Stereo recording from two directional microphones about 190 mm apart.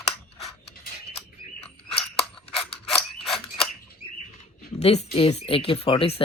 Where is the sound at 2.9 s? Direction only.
Centre (ahead or behind).